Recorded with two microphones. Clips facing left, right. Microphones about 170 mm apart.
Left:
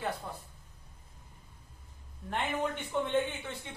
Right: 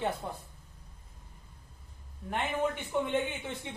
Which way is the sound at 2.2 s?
5° right (ahead or behind).